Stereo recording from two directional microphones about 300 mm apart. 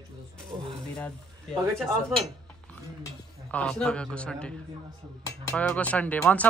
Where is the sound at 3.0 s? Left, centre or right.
Centre.